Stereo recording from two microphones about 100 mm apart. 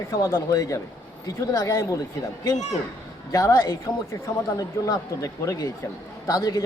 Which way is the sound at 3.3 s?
35° left (ahead or behind).